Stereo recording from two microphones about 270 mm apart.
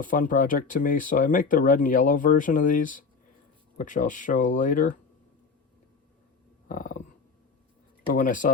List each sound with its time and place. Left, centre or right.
0.0 s speech: left
6.7 s speech: left
8.1 s speech: left